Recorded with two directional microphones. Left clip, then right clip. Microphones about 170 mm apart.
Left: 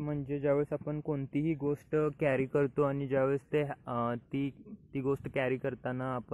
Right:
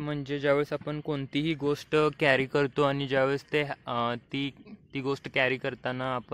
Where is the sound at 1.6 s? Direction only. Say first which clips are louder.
Right 8 dB; 45° right (ahead or behind).